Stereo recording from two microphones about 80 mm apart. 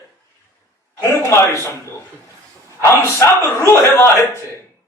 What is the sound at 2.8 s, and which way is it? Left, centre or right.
A man's voice, left.